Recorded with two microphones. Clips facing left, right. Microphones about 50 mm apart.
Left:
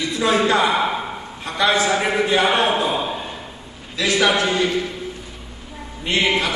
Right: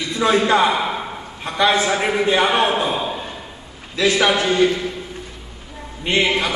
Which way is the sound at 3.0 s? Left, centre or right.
Centre.